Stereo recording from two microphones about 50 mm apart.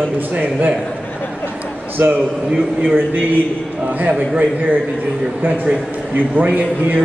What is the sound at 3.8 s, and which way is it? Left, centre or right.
Speech, right.